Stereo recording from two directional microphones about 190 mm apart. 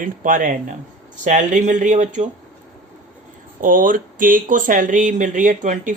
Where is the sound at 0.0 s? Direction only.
45° right (ahead or behind).